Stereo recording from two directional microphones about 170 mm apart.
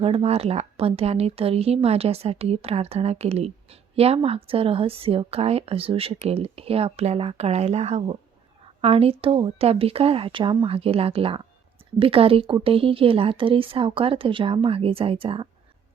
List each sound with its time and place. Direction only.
0.0 s speech: 35° right (ahead or behind)